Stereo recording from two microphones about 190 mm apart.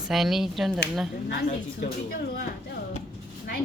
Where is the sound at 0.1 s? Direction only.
Centre (ahead or behind).